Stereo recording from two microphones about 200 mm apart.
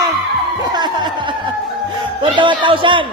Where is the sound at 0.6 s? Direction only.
20° right (ahead or behind).